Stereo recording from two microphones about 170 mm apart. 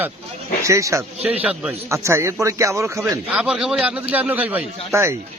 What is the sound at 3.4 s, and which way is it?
Speech, 5° right (ahead or behind).